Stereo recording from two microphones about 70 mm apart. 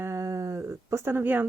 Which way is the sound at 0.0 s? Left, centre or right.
Right.